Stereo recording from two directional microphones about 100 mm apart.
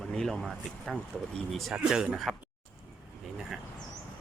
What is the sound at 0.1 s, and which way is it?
Speech, 5° left (ahead or behind).